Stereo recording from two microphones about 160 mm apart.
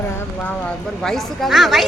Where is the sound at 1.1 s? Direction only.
Centre (ahead or behind).